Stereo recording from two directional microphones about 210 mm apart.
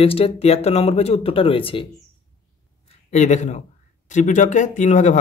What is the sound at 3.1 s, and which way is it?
Speech, 35° left (ahead or behind).